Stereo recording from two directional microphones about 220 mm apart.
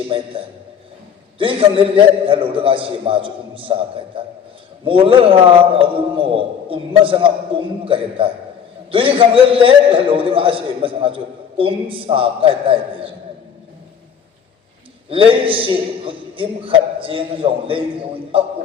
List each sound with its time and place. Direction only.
1.4 s a man's voice: 25° right (ahead or behind)
4.9 s a man's voice: 25° right (ahead or behind)
15.1 s a man's voice: 25° right (ahead or behind)